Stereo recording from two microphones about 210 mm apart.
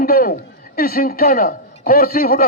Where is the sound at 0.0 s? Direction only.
45° left (ahead or behind).